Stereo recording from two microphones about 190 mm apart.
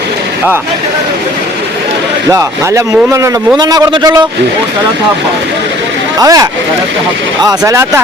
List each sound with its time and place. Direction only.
2.3 s speech: 15° right (ahead or behind)
6.1 s speech: 20° right (ahead or behind)